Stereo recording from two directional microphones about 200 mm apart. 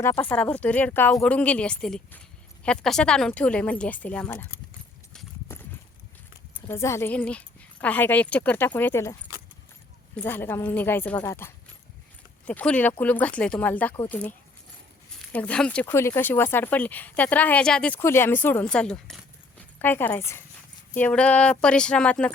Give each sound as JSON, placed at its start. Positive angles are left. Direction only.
{"t": 0.0, "sound": "speech", "side_deg": 10}
{"t": 5.1, "sound": "clip-clop", "side_deg": 10}
{"t": 6.7, "sound": "speech", "side_deg": 15}
{"t": 10.2, "sound": "speech", "side_deg": 10}